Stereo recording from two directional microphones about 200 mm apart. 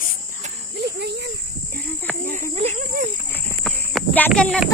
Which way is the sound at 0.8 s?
55° right (ahead or behind).